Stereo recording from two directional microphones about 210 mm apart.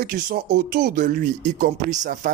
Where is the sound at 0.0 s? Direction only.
45° right (ahead or behind).